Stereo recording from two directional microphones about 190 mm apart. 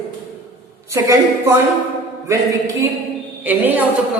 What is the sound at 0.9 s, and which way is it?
A woman's voice, 15° right (ahead or behind).